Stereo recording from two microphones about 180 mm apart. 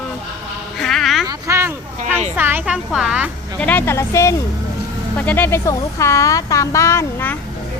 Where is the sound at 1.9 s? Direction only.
45° right (ahead or behind).